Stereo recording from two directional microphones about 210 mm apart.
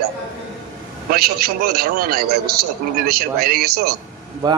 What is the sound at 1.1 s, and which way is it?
Speech, 45° right (ahead or behind).